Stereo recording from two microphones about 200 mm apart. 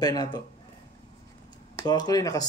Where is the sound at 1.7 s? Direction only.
20° left (ahead or behind).